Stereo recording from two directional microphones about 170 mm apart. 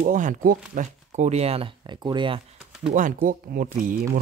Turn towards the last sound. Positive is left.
turn(degrees=-50)  # may be behind; listen again after turning